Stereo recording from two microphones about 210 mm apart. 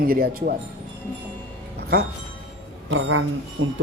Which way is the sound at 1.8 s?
50° right (ahead or behind).